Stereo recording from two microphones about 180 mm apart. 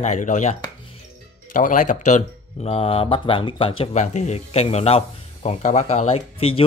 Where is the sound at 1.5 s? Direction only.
45° left (ahead or behind).